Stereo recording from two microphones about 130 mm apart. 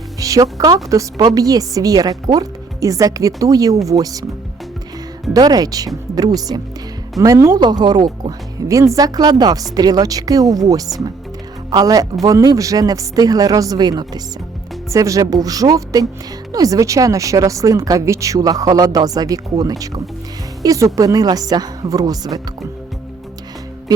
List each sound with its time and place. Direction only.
0.2 s music: 25° right (ahead or behind)
0.6 s speech: 25° right (ahead or behind)
5.3 s speech: 30° right (ahead or behind)